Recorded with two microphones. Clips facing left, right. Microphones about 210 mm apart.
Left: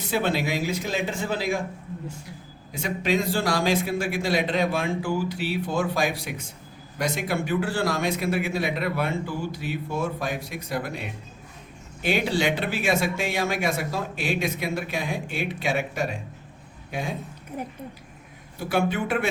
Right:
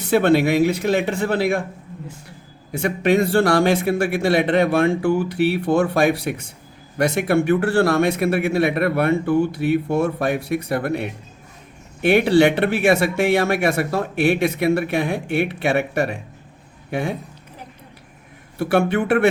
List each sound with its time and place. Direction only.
0.0 s speech: 65° right (ahead or behind)
2.7 s speech: 65° right (ahead or behind)
18.5 s speech: 65° right (ahead or behind)